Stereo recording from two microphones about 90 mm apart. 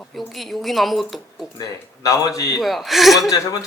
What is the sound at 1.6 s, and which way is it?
A man's voice, 40° left (ahead or behind).